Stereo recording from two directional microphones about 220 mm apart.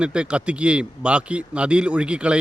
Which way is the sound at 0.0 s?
5° right (ahead or behind).